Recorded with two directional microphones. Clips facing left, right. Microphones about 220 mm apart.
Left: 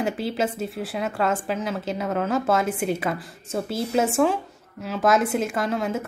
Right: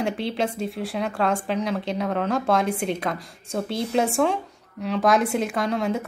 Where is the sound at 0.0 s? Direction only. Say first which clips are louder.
Even; centre (ahead or behind).